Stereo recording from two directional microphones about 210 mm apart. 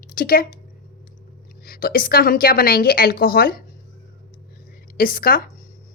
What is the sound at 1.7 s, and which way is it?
A woman's voice, 45° left (ahead or behind).